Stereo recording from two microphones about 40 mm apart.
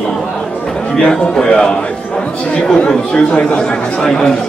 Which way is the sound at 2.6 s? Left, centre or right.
Left.